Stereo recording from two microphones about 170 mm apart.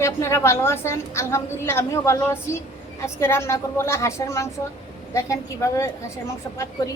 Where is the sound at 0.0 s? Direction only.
15° left (ahead or behind).